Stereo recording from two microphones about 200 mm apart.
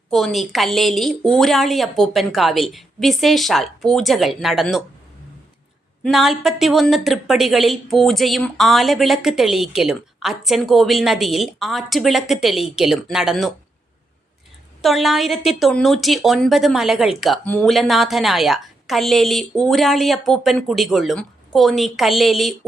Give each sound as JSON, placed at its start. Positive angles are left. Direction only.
{"t": 0.1, "sound": "a woman's voice", "side_deg": 0}
{"t": 6.0, "sound": "a woman's voice", "side_deg": 0}
{"t": 14.8, "sound": "a woman's voice", "side_deg": 0}